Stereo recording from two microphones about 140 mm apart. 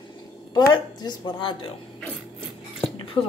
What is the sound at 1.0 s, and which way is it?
Speech, 35° left (ahead or behind).